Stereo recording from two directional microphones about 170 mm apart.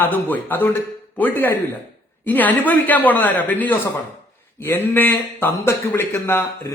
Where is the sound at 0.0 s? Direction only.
10° left (ahead or behind).